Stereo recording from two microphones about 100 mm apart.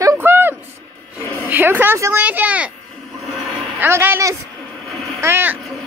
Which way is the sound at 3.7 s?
25° right (ahead or behind).